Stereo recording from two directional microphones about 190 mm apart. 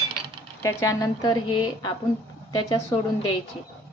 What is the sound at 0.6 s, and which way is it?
A woman's voice, 20° left (ahead or behind).